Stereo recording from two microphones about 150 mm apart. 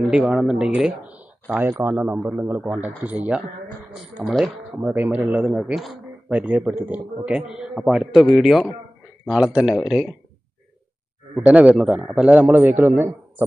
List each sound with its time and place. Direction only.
0.1 s speech: 5° right (ahead or behind)
4.7 s speech: 10° right (ahead or behind)
11.3 s speech: 10° right (ahead or behind)